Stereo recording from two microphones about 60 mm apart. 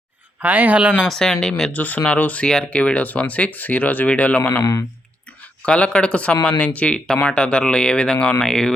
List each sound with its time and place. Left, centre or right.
0.3 s speech: right
1.0 s speech: centre
1.7 s speech: left; by 8.7 s centre